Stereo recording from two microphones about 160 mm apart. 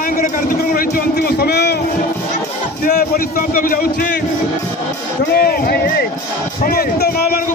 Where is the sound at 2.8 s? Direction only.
65° left (ahead or behind).